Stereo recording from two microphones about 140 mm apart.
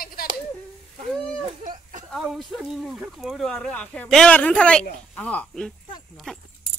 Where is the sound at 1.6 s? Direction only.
65° right (ahead or behind).